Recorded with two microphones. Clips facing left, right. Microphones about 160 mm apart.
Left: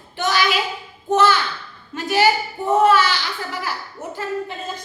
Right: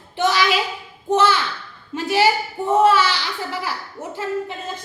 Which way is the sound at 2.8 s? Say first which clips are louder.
Even; 30° right (ahead or behind).